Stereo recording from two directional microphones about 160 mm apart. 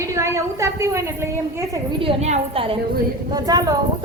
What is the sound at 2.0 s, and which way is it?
Speech, 45° right (ahead or behind).